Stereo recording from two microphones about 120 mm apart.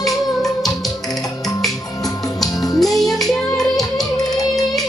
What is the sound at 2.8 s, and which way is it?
Music, centre (ahead or behind).